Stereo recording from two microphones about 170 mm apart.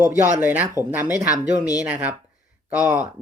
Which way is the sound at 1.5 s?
20° left (ahead or behind).